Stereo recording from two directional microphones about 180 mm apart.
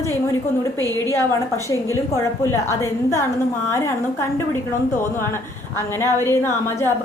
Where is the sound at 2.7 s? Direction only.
15° left (ahead or behind).